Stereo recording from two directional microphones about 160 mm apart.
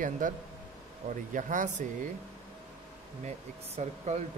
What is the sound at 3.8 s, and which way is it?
Speech, 45° right (ahead or behind).